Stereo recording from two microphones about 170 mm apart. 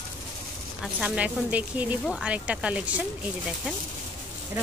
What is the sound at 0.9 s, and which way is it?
Speech, 5° right (ahead or behind).